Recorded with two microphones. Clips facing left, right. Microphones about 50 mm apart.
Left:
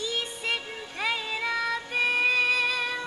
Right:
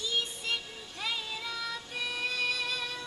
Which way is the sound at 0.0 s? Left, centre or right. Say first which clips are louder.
Left 3 dB; left.